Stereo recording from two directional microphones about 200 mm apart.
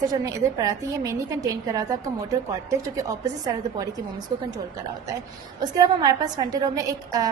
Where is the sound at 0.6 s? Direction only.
15° right (ahead or behind).